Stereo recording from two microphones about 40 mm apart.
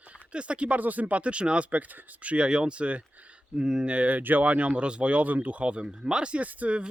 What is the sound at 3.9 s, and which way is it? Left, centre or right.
Speech, right.